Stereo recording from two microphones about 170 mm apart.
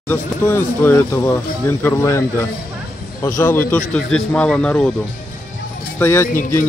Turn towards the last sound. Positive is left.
turn(degrees=15)  # may be behind; listen again after turning